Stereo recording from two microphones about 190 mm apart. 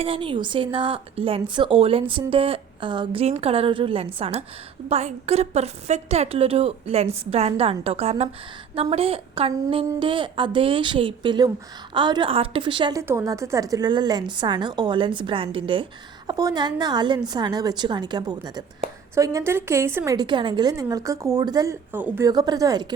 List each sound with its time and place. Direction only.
0.0 s a woman's voice: 25° right (ahead or behind); by 22.3 s 10° right (ahead or behind)
22.3 s a woman's voice: 20° right (ahead or behind)